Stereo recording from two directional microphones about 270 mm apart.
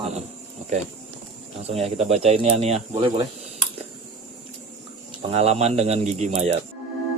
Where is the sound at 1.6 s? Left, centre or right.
Right.